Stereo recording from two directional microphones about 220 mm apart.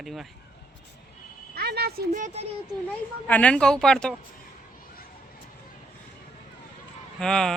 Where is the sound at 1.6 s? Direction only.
45° right (ahead or behind).